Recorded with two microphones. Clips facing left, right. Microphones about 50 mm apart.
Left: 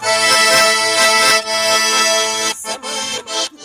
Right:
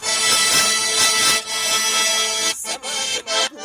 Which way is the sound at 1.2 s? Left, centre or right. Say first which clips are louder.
Left 8 dB; left.